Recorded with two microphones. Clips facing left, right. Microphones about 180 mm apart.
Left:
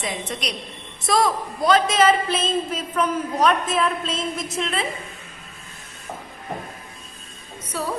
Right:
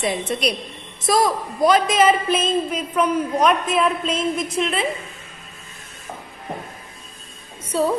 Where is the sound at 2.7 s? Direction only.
5° right (ahead or behind).